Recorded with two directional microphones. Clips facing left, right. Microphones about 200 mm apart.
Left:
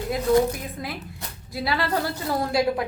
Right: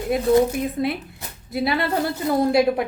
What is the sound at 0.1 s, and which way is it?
A woman's voice, 25° right (ahead or behind).